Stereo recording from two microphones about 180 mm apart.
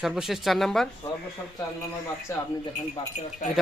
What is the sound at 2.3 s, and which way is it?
Speech, 15° left (ahead or behind).